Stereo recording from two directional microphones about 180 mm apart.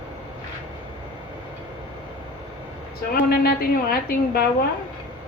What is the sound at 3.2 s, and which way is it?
A woman's voice, 60° left (ahead or behind).